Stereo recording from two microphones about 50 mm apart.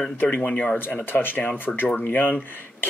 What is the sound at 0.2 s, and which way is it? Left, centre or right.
Speech, left.